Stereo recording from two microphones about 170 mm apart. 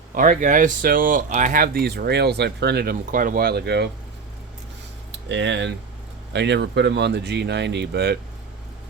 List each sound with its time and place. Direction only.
0.1 s speech: 50° right (ahead or behind); by 3.8 s 75° right (ahead or behind)
5.3 s speech: 90° right; by 8.2 s 75° right (ahead or behind)